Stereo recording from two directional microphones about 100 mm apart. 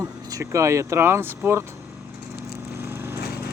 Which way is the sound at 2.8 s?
20° right (ahead or behind).